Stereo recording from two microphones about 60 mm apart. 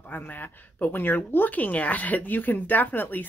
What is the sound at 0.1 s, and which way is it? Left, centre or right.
Speech, left.